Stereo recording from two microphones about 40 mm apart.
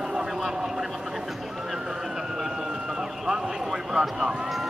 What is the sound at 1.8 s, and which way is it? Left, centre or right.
Run, centre.